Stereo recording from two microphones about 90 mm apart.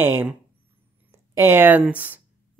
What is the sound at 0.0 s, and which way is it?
Speech, 20° right (ahead or behind).